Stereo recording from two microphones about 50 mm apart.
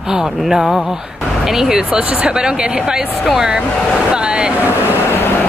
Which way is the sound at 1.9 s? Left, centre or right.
Right.